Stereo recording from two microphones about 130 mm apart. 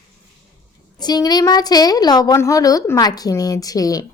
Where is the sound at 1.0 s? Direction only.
30° left (ahead or behind).